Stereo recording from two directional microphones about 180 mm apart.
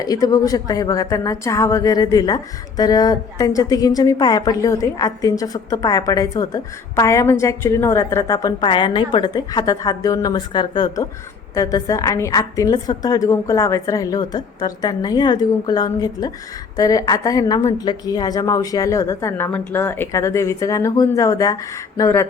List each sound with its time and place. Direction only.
0.0 s speech: 20° left (ahead or behind)